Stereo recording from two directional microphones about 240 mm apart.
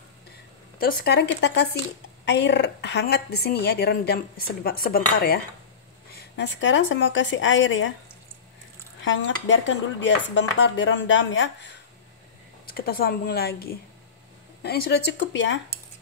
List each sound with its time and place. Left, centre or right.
0.7 s a woman's voice: left
9.0 s speech: left
12.6 s a woman's voice: left